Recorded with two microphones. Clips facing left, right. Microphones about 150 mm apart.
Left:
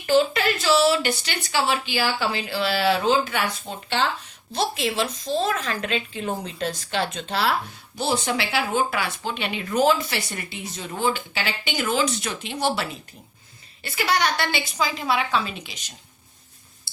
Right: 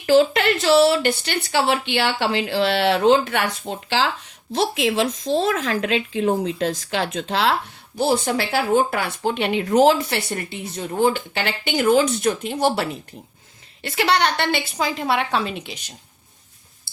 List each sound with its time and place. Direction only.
0.0 s a woman's voice: 80° right
7.9 s speech: 50° right (ahead or behind)
13.8 s speech: 70° right (ahead or behind)